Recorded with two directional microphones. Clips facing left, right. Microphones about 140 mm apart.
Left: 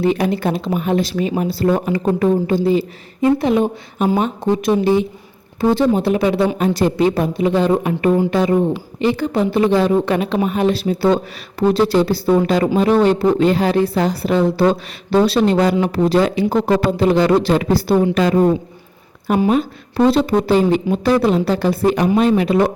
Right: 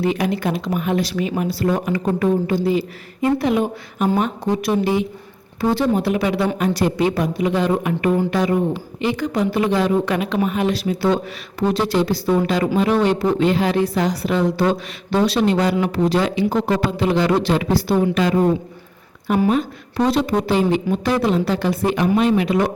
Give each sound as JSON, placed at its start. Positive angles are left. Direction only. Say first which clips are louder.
{"t": 0.0, "sound": "speech", "louder": "left 3 dB", "side_deg": 30}